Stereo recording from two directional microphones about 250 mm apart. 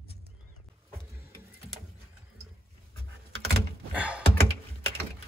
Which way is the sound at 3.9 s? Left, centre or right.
Centre.